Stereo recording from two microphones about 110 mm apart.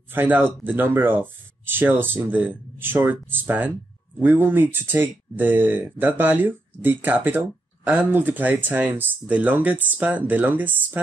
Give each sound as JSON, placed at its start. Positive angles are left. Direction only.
{"t": 0.1, "sound": "speech", "side_deg": -20}